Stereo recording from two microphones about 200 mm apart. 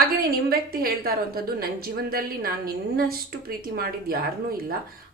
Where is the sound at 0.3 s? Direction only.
50° right (ahead or behind).